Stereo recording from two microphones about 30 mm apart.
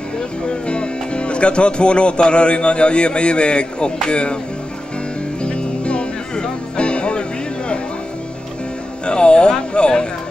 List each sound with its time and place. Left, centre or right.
0.5 s speech: left
5.4 s music: left
9.0 s speech: left